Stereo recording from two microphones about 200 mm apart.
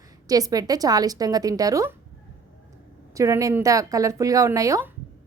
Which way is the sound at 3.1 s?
15° right (ahead or behind).